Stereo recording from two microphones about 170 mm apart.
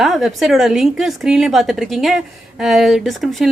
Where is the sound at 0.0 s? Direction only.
Centre (ahead or behind).